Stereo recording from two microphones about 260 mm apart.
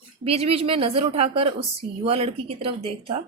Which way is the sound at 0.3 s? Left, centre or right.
Right.